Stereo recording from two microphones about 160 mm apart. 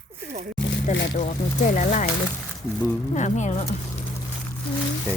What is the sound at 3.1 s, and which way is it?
Speech, 50° left (ahead or behind).